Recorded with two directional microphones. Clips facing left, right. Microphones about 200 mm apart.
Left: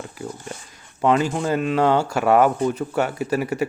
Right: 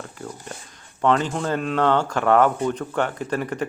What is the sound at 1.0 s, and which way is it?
Speech, 10° left (ahead or behind).